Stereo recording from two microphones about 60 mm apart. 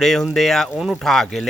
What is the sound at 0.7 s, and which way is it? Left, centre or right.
Speech, centre.